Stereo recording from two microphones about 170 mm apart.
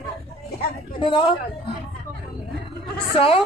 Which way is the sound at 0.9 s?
25° left (ahead or behind).